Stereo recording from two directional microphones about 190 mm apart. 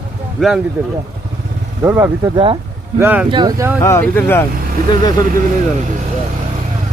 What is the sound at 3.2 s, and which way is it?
Speech, 20° right (ahead or behind).